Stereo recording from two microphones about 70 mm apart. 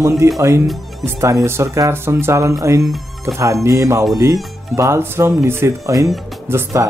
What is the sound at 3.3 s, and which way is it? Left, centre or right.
Speech, right.